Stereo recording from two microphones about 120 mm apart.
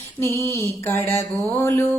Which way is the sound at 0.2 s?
20° left (ahead or behind).